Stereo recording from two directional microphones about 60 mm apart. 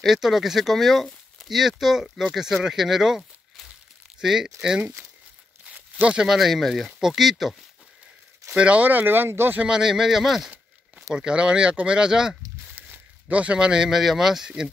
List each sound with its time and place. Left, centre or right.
0.0 s speech: centre
5.9 s speech: centre
6.2 s speech: centre
8.5 s speech: right
9.6 s speech: centre
12.7 s a sound: right
13.4 s speech: centre